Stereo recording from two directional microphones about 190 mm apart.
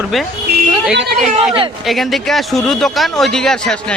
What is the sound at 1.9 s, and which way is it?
Speech, centre (ahead or behind).